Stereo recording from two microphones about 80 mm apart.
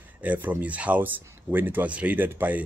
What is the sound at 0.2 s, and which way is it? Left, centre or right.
Speech, right.